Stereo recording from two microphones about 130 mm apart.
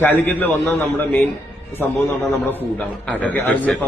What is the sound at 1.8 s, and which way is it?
Speech, 15° left (ahead or behind).